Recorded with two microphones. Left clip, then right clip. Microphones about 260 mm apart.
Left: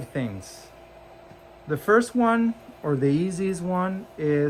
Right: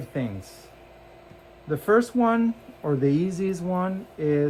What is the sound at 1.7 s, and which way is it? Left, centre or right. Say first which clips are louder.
Speech: left 1 dB; left.